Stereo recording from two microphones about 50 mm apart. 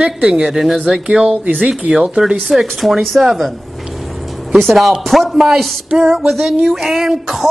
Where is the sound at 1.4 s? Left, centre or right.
Right.